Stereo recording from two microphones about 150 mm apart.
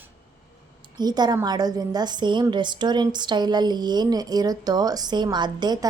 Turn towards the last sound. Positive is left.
turn(degrees=-30)  # may be behind; listen again after turning